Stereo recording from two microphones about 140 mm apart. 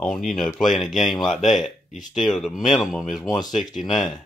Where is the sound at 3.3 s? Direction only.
30° left (ahead or behind).